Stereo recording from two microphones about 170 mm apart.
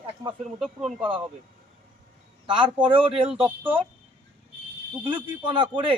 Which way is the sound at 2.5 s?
30° right (ahead or behind).